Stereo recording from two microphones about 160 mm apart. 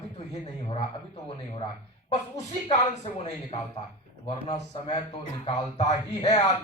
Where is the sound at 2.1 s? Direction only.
45° left (ahead or behind).